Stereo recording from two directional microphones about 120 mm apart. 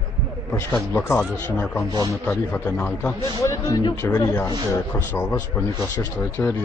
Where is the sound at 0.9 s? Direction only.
15° left (ahead or behind).